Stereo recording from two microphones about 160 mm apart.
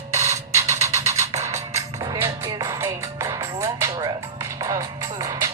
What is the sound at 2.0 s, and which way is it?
Music, 20° right (ahead or behind).